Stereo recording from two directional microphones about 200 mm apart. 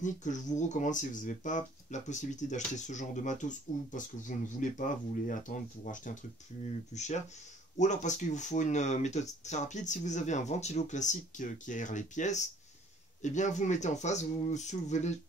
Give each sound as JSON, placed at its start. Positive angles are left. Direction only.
{"t": 0.0, "sound": "speech", "side_deg": 40}